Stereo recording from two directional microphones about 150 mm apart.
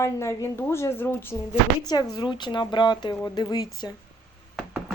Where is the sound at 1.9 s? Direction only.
25° left (ahead or behind).